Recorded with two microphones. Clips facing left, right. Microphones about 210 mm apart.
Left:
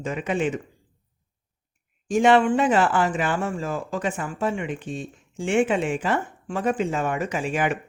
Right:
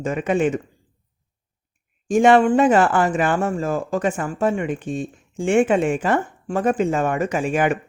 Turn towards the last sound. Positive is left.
turn(degrees=-50)  # may be behind; listen again after turning